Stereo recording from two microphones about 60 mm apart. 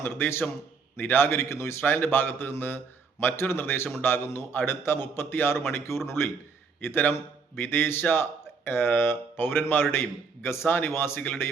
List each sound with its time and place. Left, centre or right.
0.0 s a man's voice: left
1.8 s a man's voice: left